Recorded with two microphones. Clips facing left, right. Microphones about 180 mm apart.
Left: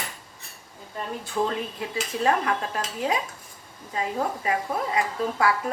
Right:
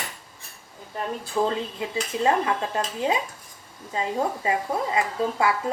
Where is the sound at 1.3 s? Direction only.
25° right (ahead or behind).